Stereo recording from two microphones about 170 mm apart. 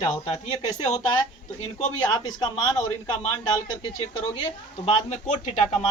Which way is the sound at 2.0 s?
25° left (ahead or behind).